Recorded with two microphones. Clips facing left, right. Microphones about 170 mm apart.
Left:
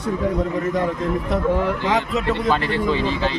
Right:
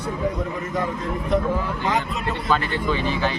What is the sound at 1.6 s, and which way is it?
Speech, 80° left.